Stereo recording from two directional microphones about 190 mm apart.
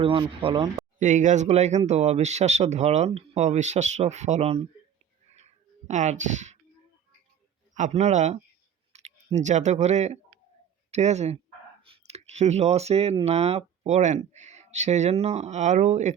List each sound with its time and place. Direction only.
0.0 s speech: 30° right (ahead or behind)
0.9 s speech: 40° right (ahead or behind)
5.9 s speech: 40° right (ahead or behind)
7.7 s speech: 40° right (ahead or behind)